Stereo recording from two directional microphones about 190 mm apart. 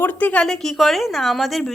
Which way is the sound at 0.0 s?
10° left (ahead or behind).